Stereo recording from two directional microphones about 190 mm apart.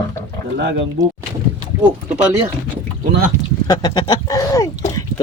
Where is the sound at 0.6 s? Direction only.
65° right (ahead or behind).